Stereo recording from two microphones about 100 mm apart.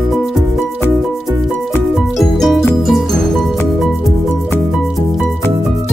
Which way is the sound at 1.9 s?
Centre (ahead or behind).